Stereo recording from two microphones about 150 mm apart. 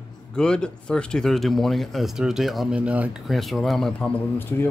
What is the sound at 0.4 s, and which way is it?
Speech, 5° left (ahead or behind).